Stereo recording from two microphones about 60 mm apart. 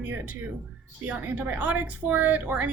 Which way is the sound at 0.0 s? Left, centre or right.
Right.